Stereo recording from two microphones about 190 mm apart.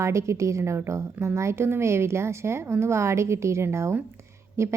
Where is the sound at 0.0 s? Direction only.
15° right (ahead or behind).